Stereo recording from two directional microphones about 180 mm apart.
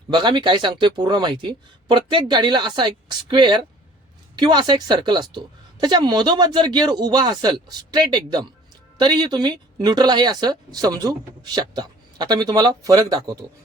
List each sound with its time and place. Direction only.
0.1 s speech: 25° right (ahead or behind)